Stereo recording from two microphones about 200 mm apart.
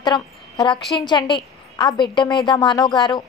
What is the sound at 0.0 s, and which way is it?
A woman's voice, 20° left (ahead or behind).